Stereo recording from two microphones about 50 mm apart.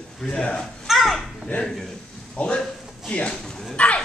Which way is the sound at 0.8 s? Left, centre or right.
Centre.